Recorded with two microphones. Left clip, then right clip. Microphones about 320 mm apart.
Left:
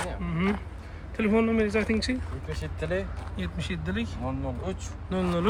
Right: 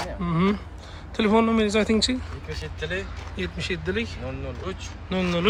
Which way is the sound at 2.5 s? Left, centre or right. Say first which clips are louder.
Right 1 dB; left.